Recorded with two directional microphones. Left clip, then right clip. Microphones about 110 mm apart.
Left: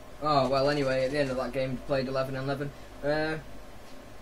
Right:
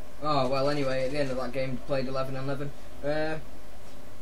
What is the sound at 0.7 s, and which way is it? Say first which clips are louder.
Speech: left 2 dB; 30° right (ahead or behind).